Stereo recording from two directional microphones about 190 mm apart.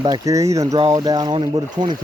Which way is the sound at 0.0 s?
20° right (ahead or behind).